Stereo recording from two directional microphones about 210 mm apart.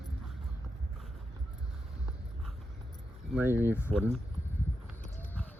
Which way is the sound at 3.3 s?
10° right (ahead or behind).